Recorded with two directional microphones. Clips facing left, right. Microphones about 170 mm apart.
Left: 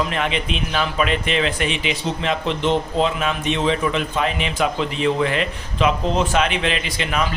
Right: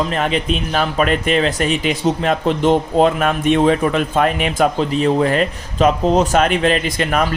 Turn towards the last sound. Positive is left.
turn(degrees=-45)  # may be behind; listen again after turning